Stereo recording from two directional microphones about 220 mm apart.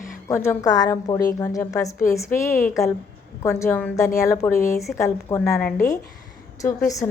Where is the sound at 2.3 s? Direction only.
35° left (ahead or behind).